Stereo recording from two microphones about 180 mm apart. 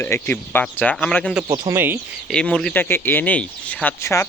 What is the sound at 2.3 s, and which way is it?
Speech, 5° left (ahead or behind).